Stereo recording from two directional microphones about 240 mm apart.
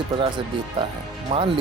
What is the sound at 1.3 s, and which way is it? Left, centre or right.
Speech, right.